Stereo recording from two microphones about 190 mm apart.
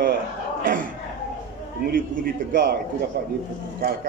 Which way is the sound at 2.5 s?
55° right (ahead or behind).